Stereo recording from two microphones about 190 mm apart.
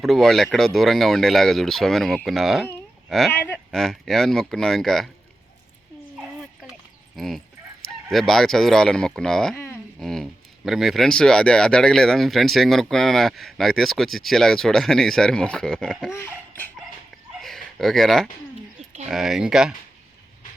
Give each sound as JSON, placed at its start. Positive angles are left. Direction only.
{"t": 0.0, "sound": "speech", "side_deg": 0}
{"t": 7.2, "sound": "speech", "side_deg": 0}
{"t": 16.1, "sound": "a sound", "side_deg": 10}
{"t": 19.0, "sound": "speech", "side_deg": 0}